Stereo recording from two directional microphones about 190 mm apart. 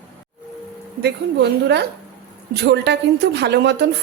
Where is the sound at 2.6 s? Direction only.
60° right (ahead or behind).